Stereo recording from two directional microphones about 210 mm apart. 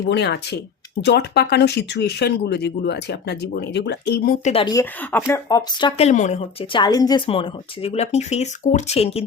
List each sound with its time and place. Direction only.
0.0 s speech: 55° left (ahead or behind)
4.4 s speech: 25° left (ahead or behind)
4.7 s speech: 10° left (ahead or behind)
6.0 s speech: 35° left (ahead or behind)